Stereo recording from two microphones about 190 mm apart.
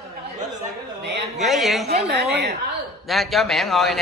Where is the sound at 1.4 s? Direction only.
Centre (ahead or behind).